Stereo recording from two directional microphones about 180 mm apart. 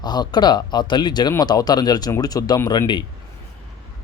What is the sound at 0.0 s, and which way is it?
Speech, 25° left (ahead or behind).